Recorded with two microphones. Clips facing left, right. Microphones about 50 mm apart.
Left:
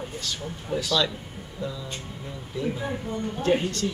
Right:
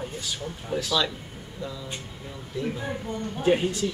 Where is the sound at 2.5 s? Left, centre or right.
Centre.